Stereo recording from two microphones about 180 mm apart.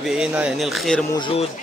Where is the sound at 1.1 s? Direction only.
30° left (ahead or behind).